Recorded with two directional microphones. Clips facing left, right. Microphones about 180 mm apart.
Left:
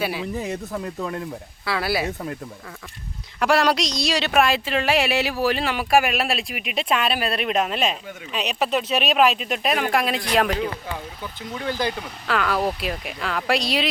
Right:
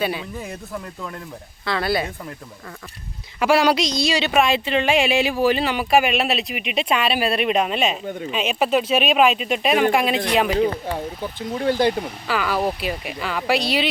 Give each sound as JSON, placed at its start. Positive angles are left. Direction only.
{"t": 0.0, "sound": "speech", "side_deg": 5}
{"t": 1.6, "sound": "speech", "side_deg": 5}
{"t": 3.4, "sound": "speech", "side_deg": 0}
{"t": 10.8, "sound": "speech", "side_deg": -30}
{"t": 12.3, "sound": "speech", "side_deg": 0}